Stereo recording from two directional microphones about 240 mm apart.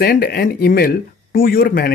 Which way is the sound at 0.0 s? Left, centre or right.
Left.